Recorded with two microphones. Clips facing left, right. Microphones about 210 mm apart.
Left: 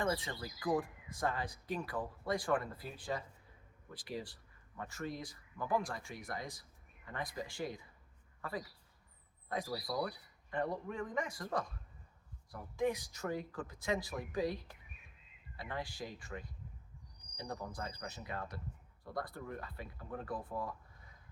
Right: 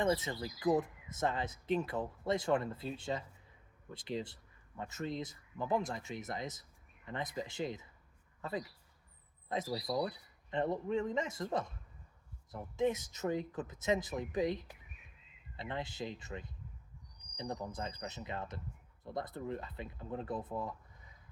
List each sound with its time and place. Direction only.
0.0 s speech: 20° right (ahead or behind)